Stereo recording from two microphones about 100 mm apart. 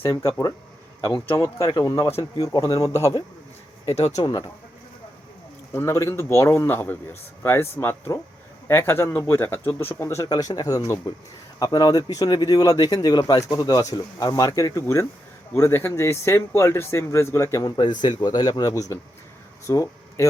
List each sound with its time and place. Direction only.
0.1 s speech: 30° left (ahead or behind)
5.7 s speech: 30° left (ahead or behind)
10.2 s speech: 40° left (ahead or behind)
17.7 s speech: 50° left (ahead or behind)
18.7 s speech: 30° left (ahead or behind)